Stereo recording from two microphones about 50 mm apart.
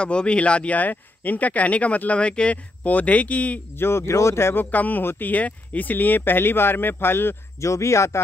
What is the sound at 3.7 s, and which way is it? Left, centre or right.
Speech, left.